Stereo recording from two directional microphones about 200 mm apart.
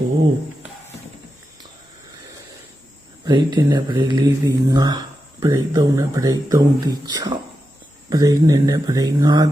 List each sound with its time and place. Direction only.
3.2 s speech: 25° right (ahead or behind)